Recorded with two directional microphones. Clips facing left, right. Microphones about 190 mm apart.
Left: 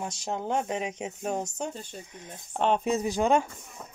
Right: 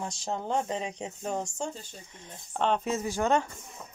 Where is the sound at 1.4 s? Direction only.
20° left (ahead or behind).